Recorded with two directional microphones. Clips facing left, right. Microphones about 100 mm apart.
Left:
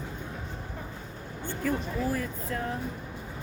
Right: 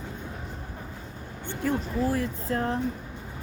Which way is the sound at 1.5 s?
25° right (ahead or behind).